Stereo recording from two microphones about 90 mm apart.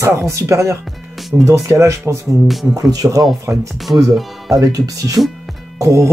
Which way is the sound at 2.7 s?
45° right (ahead or behind).